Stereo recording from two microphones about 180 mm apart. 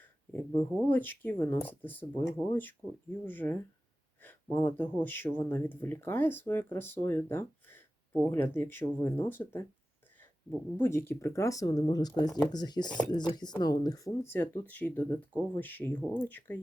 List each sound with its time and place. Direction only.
0.3 s speech: 10° left (ahead or behind)
10.8 s speech: 15° left (ahead or behind)